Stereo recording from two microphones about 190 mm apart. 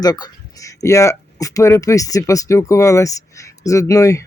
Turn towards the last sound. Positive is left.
turn(degrees=15)  # may be behind; listen again after turning